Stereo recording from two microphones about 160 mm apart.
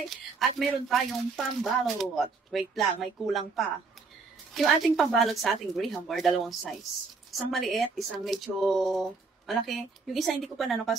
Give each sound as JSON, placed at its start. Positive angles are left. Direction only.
{"t": 0.1, "sound": "speech", "side_deg": 0}